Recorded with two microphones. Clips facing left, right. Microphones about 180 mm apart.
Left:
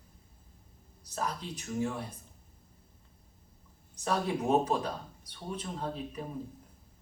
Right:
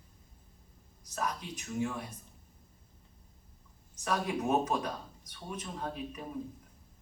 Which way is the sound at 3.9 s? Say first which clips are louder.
Left 2 dB; 30° left (ahead or behind).